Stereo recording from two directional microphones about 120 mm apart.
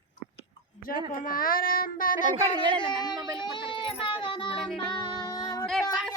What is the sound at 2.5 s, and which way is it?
Speech, 40° right (ahead or behind).